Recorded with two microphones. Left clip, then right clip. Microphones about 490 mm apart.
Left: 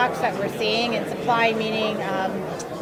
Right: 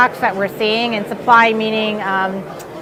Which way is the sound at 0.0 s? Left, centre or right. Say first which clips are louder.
Right 7 dB; right.